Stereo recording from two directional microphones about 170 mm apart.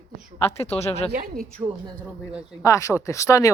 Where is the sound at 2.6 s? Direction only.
20° left (ahead or behind).